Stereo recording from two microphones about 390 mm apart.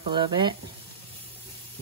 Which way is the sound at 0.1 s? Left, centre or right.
Centre.